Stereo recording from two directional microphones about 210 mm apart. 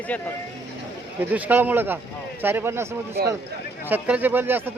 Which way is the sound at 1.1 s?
10° right (ahead or behind).